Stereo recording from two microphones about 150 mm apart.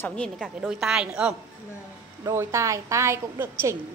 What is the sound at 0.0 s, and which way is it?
Speech, 5° left (ahead or behind).